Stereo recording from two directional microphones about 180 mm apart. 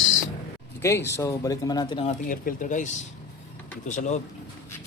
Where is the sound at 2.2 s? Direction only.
50° left (ahead or behind).